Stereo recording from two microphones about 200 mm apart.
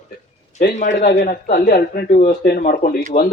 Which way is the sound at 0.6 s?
40° left (ahead or behind).